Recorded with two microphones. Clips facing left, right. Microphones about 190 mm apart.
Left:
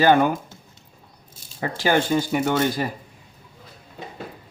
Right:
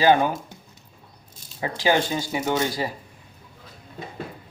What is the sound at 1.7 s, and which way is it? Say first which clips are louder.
Speech: left 2 dB; 50° left (ahead or behind).